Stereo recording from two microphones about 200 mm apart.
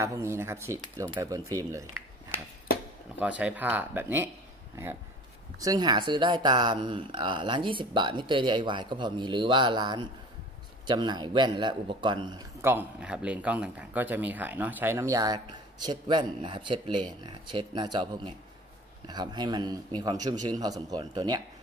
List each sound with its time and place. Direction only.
0.0 s speech: 15° right (ahead or behind)
3.2 s speech: 5° right (ahead or behind)
5.6 s a man's voice: 20° right (ahead or behind)